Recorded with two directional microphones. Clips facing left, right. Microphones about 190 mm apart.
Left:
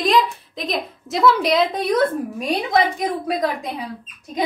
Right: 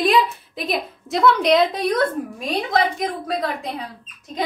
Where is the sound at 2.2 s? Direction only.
20° left (ahead or behind).